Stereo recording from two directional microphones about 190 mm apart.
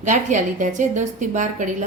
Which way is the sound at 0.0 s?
40° right (ahead or behind).